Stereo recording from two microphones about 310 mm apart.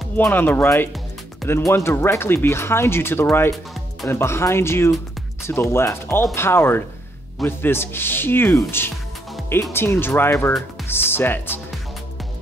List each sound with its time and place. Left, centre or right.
0.2 s speech: centre